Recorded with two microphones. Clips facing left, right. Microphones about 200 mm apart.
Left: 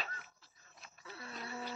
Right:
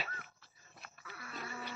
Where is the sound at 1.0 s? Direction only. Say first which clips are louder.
Even; 25° left (ahead or behind).